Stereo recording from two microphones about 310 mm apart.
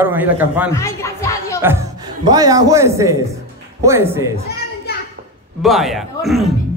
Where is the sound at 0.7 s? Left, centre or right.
Centre.